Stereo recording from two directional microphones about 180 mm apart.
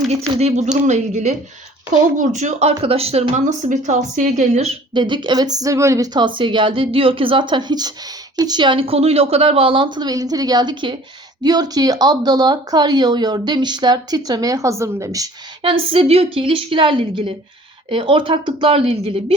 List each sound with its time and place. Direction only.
0.1 s speech: 35° right (ahead or behind)